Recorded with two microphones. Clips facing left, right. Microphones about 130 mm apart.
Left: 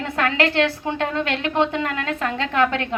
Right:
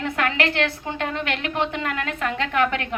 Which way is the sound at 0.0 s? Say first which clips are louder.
Left 2 dB; 30° left (ahead or behind).